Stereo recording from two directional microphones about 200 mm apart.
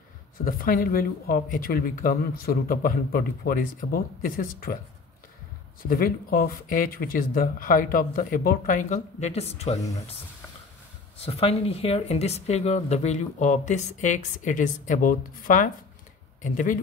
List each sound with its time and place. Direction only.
0.5 s speech: 45° left (ahead or behind)
5.8 s speech: 45° left (ahead or behind)
11.1 s speech: 30° left (ahead or behind)